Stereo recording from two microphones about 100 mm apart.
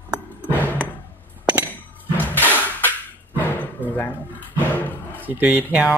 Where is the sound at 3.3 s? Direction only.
20° left (ahead or behind).